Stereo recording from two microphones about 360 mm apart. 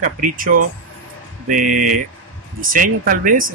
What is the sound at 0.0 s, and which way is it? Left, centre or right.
Speech, right.